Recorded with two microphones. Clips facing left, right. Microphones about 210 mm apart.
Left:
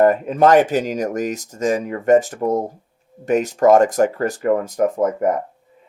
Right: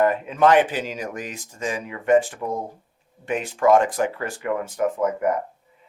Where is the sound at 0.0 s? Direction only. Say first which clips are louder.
Left 4 dB; 45° left (ahead or behind).